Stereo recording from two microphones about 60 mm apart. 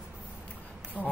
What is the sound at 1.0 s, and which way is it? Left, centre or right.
Speech, right.